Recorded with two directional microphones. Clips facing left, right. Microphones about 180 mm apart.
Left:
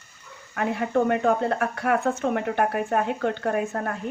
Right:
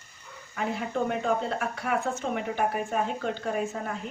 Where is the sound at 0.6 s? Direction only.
60° left (ahead or behind).